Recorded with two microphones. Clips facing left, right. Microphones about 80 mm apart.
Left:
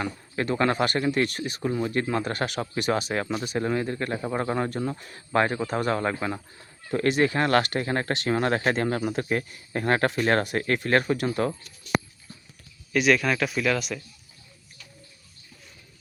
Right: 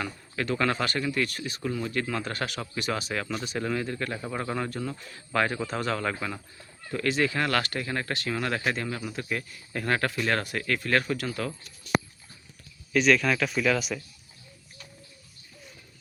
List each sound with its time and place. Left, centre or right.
0.5 s speech: left
5.5 s speech: centre
5.9 s speech: left
12.9 s a man's voice: centre